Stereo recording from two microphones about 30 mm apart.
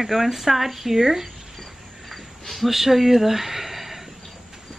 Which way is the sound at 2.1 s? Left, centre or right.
Centre.